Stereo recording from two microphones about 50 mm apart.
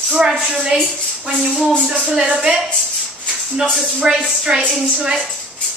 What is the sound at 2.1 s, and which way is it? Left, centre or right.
Speech, centre.